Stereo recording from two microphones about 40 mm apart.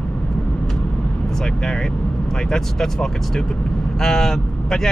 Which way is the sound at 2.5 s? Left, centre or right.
Centre.